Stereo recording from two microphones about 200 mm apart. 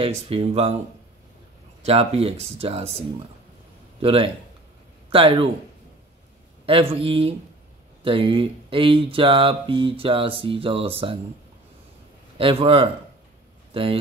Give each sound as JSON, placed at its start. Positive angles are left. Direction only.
{"t": 0.3, "sound": "speech", "side_deg": -30}
{"t": 1.8, "sound": "speech", "side_deg": -30}
{"t": 4.0, "sound": "speech", "side_deg": -25}
{"t": 6.6, "sound": "speech", "side_deg": -30}
{"t": 12.4, "sound": "speech", "side_deg": -25}